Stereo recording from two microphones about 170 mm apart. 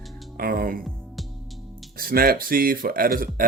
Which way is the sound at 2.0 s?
60° right (ahead or behind).